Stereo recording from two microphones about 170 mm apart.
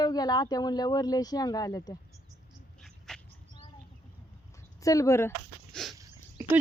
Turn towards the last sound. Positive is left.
turn(degrees=-15)  # may be behind; listen again after turning